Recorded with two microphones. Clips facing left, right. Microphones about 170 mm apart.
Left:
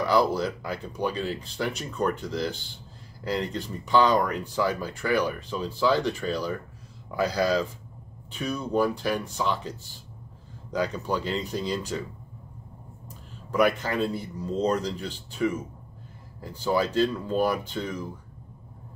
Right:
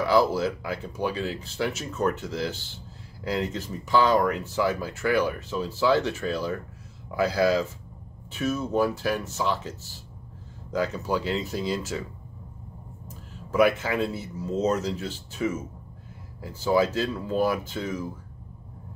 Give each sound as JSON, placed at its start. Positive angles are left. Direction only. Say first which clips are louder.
{"t": 0.0, "sound": "speech", "louder": "right 1 dB", "side_deg": -5}
{"t": 13.5, "sound": "speech", "louder": "right 2 dB", "side_deg": -5}